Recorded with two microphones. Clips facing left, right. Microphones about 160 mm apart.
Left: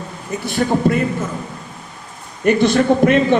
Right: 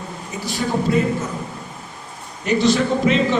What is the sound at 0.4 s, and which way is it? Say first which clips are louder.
Speech: left 5 dB; 60° left (ahead or behind).